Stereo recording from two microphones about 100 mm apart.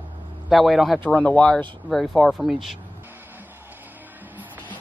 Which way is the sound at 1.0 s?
15° left (ahead or behind).